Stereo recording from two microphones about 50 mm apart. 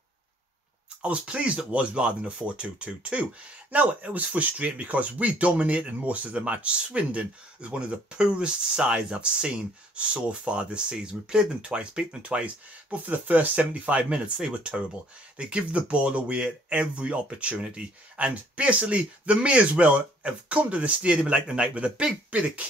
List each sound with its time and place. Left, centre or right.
1.0 s speech: right
12.9 s speech: right